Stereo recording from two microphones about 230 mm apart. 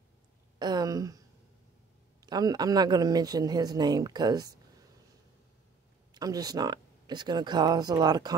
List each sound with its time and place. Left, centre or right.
0.6 s speech: centre
2.2 s speech: centre
6.1 s speech: centre